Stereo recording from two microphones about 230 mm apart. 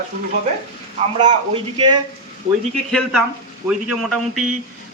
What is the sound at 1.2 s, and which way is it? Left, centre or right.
Speech, right.